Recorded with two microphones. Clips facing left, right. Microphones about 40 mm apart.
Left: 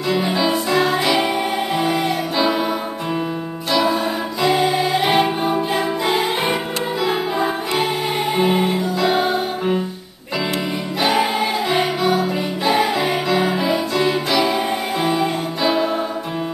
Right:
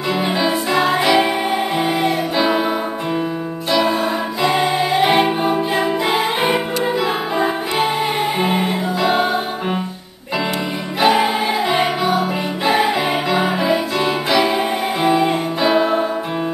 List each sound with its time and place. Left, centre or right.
0.1 s music: centre
3.7 s music: centre
11.0 s music: centre